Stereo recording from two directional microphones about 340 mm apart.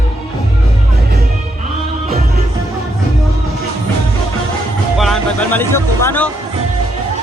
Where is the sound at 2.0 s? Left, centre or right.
Centre.